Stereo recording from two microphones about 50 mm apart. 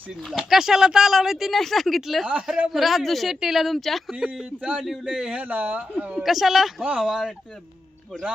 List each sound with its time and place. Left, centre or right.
0.3 s speech: centre
4.1 s a man's voice: centre
5.4 s speech: right
5.9 s speech: right
6.2 s a man's voice: centre